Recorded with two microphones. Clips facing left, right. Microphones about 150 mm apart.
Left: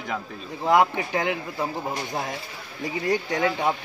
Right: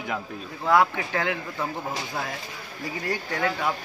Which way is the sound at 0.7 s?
20° left (ahead or behind).